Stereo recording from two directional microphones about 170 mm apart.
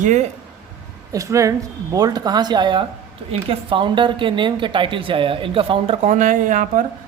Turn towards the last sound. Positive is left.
turn(degrees=-50)  # may be behind; listen again after turning